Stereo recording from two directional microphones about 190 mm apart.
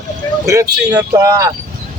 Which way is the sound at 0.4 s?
15° right (ahead or behind).